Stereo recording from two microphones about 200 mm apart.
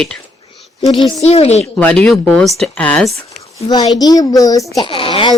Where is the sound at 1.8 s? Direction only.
5° left (ahead or behind).